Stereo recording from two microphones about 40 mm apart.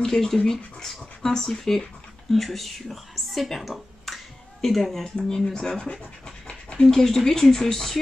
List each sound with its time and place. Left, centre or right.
0.0 s speech: centre
5.3 s speech: centre
6.9 s speech: centre